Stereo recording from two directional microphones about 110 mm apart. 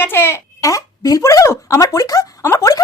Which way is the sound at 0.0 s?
20° left (ahead or behind).